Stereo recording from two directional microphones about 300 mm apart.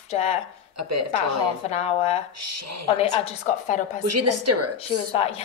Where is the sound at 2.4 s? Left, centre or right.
Right.